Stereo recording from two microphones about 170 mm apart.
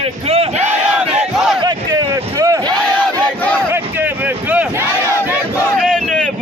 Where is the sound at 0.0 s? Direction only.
35° right (ahead or behind).